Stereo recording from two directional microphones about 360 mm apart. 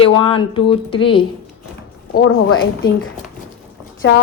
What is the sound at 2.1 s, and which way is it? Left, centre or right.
A woman's voice, left.